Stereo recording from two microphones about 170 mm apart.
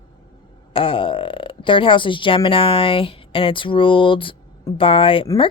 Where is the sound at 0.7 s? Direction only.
30° left (ahead or behind).